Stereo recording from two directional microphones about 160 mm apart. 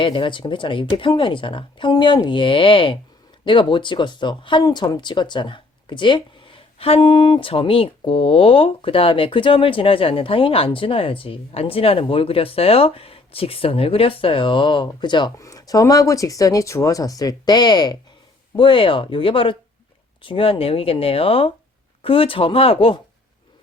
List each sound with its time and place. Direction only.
0.0 s speech: 30° left (ahead or behind)